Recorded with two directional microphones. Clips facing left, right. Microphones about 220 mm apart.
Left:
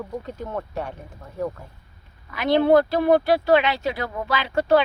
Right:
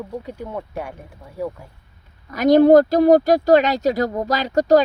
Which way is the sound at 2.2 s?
40° right (ahead or behind).